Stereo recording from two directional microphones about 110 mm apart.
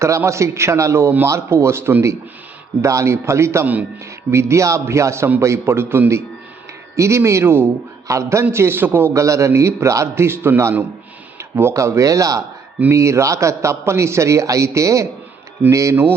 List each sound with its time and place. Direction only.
0.0 s a man's voice: 25° right (ahead or behind)